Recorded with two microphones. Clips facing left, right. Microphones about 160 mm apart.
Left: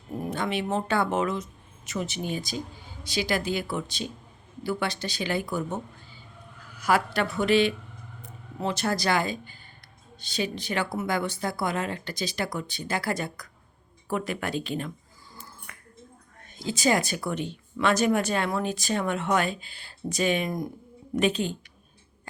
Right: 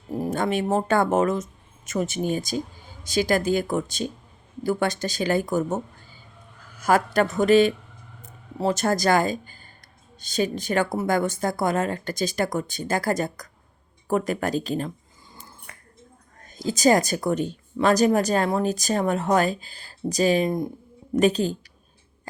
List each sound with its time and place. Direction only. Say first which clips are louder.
0.1 s speech: right 5 dB; 40° right (ahead or behind)
15.7 s a sound: right 1 dB; 35° right (ahead or behind)
16.4 s speech: right 6 dB; 40° right (ahead or behind)
21.2 s speech: right 5 dB; 40° right (ahead or behind)